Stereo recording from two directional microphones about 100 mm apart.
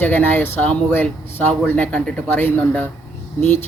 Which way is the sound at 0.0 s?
15° left (ahead or behind).